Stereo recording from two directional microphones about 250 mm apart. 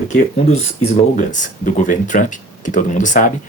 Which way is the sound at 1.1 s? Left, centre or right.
Left.